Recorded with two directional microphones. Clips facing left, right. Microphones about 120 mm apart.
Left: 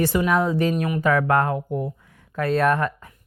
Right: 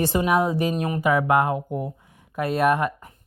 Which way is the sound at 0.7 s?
30° right (ahead or behind).